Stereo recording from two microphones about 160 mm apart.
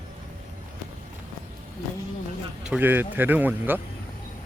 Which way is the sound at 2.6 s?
10° right (ahead or behind).